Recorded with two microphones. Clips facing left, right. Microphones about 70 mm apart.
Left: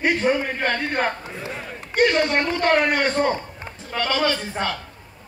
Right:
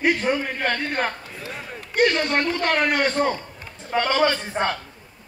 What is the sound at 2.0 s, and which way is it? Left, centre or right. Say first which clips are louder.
A man's voice: left 2 dB; centre.